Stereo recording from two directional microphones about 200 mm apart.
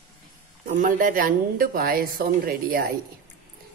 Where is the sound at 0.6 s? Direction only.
40° right (ahead or behind).